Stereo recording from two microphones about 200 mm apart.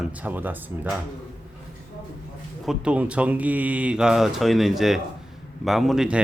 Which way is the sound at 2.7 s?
5° right (ahead or behind).